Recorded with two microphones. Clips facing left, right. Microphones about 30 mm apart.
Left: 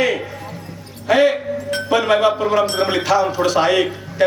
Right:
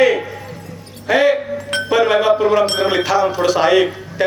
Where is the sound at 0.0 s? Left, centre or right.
Centre.